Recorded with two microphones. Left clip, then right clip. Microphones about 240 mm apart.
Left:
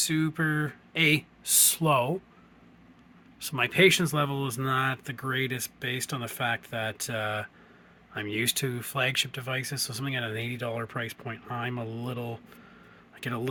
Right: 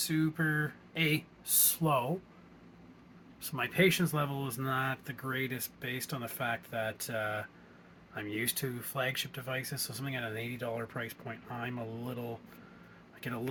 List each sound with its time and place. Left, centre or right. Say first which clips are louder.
0.0 s speech: left 4 dB; left
3.4 s speech: left 7 dB; left